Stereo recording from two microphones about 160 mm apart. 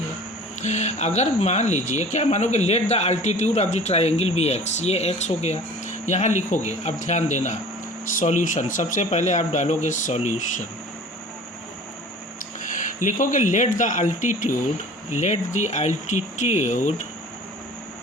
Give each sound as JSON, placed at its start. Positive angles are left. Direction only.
{"t": 0.6, "sound": "speech", "side_deg": 45}
{"t": 12.6, "sound": "speech", "side_deg": 55}